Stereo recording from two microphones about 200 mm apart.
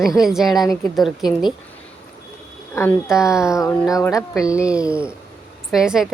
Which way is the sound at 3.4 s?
15° left (ahead or behind).